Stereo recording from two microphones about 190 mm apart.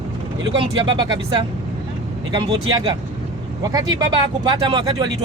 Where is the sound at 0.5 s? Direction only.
25° right (ahead or behind).